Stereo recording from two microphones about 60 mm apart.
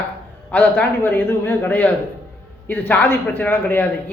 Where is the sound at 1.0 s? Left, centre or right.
Left.